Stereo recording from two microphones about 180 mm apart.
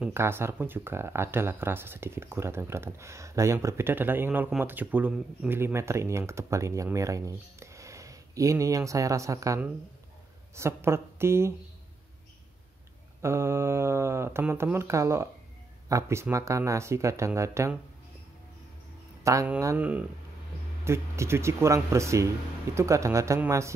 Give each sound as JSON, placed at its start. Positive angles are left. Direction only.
{"t": 0.0, "sound": "speech", "side_deg": -15}
{"t": 13.2, "sound": "speech", "side_deg": -15}
{"t": 19.2, "sound": "speech", "side_deg": -15}